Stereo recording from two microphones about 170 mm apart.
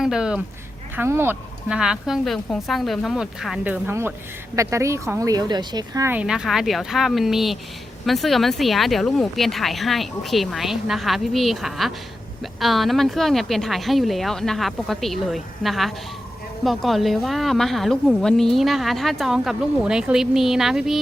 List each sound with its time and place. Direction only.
0.0 s a woman's voice: 5° right (ahead or behind)
6.1 s a woman's voice: 5° right (ahead or behind)